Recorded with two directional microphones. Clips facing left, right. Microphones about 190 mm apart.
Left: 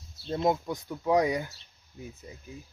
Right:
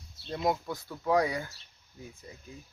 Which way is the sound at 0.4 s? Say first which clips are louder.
Left 2 dB; 15° left (ahead or behind).